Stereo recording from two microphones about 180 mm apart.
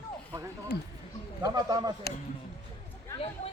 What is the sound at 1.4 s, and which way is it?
Speech, 20° right (ahead or behind).